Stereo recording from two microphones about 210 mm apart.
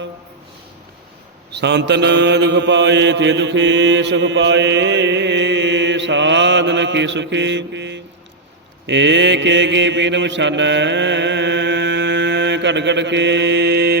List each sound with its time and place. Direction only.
1.5 s mantra: 55° right (ahead or behind)